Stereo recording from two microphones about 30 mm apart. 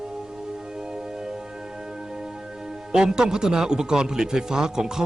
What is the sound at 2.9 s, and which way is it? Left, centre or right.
A man's voice, right.